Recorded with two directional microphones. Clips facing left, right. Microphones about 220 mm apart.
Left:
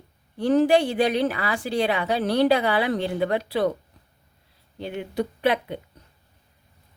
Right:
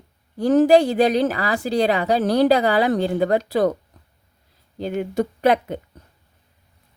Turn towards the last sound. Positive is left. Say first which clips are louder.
# right 5 dB
turn(degrees=-45)  # may be behind; listen again after turning